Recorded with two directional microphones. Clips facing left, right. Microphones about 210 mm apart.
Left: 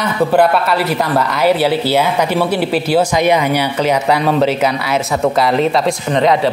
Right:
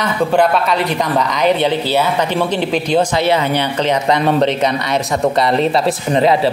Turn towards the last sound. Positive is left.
turn(degrees=-5)  # may be behind; listen again after turning